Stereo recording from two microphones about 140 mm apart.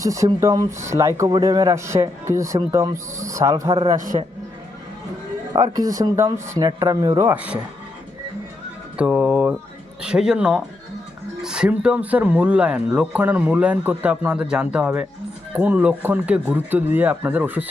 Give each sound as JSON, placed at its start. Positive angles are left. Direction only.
{"t": 0.0, "sound": "speech", "side_deg": -25}
{"t": 4.1, "sound": "a man's voice", "side_deg": -40}
{"t": 5.5, "sound": "speech", "side_deg": -25}
{"t": 7.3, "sound": "speech", "side_deg": -10}
{"t": 9.0, "sound": "speech", "side_deg": -10}